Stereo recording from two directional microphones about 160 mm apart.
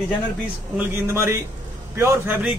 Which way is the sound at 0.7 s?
15° right (ahead or behind).